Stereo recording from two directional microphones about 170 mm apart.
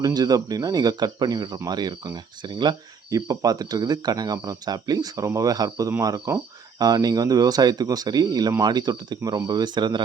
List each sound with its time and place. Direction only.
0.0 s speech: 20° right (ahead or behind)